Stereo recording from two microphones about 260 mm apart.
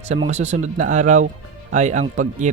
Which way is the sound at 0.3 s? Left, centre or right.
Right.